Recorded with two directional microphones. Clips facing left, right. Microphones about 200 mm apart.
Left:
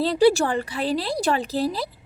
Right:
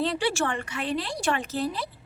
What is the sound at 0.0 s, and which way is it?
Speech, 35° left (ahead or behind).